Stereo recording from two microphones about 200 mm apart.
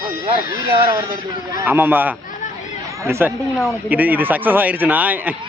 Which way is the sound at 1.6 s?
10° right (ahead or behind).